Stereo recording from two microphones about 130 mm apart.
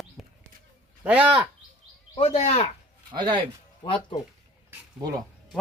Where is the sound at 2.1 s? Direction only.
50° left (ahead or behind).